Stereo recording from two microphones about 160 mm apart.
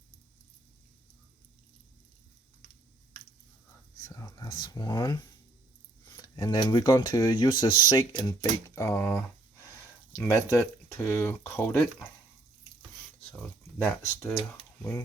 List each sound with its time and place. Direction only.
4.1 s speech: 20° left (ahead or behind)
13.8 s speech: 5° left (ahead or behind)